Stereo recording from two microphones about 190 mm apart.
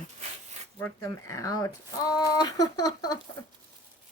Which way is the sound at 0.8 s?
15° left (ahead or behind).